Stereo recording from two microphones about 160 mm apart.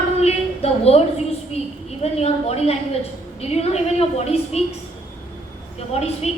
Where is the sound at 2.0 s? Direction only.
40° left (ahead or behind).